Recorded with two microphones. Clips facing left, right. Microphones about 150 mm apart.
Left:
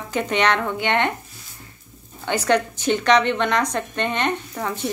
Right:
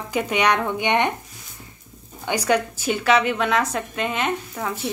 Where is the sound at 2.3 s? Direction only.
10° right (ahead or behind).